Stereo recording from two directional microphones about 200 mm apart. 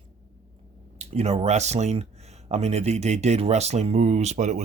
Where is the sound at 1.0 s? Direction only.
30° right (ahead or behind).